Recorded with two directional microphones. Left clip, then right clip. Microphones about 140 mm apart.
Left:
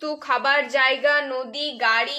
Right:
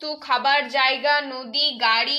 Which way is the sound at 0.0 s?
40° left (ahead or behind).